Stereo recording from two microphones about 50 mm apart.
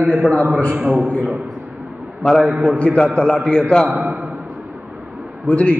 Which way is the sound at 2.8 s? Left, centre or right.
Left.